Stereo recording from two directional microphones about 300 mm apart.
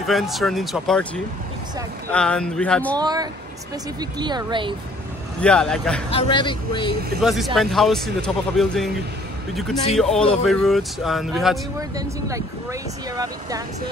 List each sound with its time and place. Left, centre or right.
0.0 s speech: centre
3.0 s speech: centre
5.4 s speech: centre
6.0 s speech: centre
7.2 s speech: centre
9.9 s speech: centre
11.9 s speech: centre